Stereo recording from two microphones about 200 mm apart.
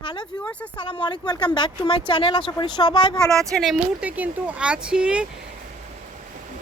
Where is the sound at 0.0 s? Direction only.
25° left (ahead or behind).